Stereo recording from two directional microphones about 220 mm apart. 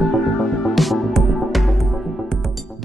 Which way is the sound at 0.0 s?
Centre (ahead or behind).